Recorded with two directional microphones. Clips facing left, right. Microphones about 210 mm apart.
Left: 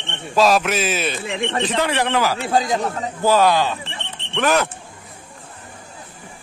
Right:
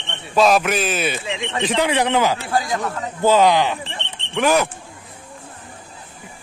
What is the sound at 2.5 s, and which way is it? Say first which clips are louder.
Speech: left 2 dB; 20° left (ahead or behind).